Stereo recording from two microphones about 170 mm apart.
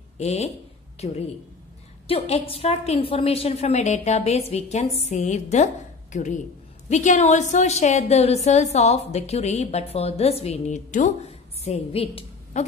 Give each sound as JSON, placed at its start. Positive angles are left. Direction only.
{"t": 0.2, "sound": "a woman's voice", "side_deg": 40}